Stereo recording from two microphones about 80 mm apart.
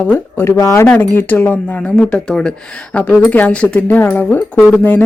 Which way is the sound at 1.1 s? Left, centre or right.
Left.